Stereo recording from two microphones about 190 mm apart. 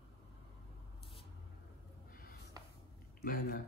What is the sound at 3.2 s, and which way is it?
Speech, 50° left (ahead or behind).